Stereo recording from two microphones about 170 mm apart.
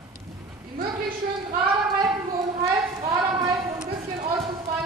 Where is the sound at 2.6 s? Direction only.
20° right (ahead or behind).